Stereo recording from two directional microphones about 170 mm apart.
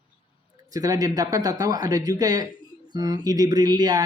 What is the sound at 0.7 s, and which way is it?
Speech, 20° right (ahead or behind).